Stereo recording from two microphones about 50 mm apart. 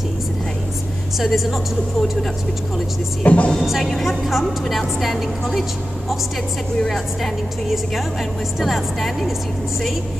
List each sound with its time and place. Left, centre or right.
1.2 s a woman's voice: centre
3.3 s speech: left
3.5 s a woman's voice: centre
3.9 s a woman's voice: centre
4.3 s a woman's voice: centre
8.5 s a woman's voice: centre